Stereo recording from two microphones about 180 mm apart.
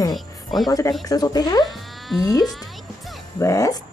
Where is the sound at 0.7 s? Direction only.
20° left (ahead or behind).